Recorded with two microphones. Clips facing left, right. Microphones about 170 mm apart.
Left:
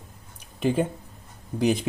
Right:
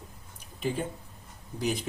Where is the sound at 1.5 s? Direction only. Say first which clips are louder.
Left 8 dB; 70° left (ahead or behind).